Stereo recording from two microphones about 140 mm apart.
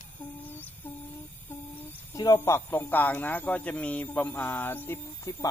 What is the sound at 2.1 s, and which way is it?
Speech, 25° left (ahead or behind).